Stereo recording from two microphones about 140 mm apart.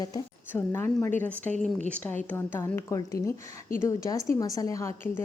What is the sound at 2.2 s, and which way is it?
A woman's voice, 15° left (ahead or behind).